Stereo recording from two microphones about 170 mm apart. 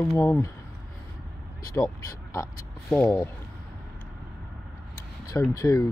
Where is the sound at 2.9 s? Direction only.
5° left (ahead or behind).